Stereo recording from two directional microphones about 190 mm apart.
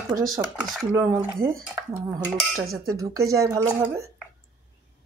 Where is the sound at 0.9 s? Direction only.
15° right (ahead or behind).